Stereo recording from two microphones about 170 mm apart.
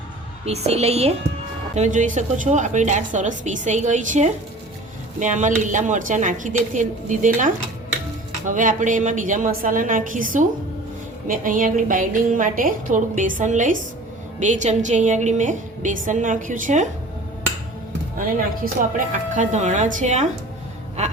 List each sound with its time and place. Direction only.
0.4 s a woman's voice: 40° right (ahead or behind)
18.6 s a woman's voice: 55° right (ahead or behind)